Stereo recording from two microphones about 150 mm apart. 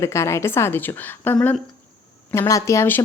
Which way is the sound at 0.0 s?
20° left (ahead or behind).